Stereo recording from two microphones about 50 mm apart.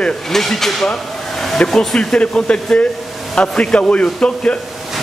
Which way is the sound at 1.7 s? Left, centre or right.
Centre.